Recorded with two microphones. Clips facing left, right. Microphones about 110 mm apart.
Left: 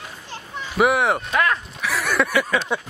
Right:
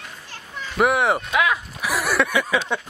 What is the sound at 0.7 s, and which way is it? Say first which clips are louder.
Speech: left 1 dB; centre (ahead or behind).